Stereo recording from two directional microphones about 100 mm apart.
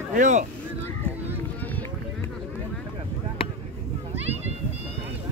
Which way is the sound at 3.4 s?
75° left (ahead or behind).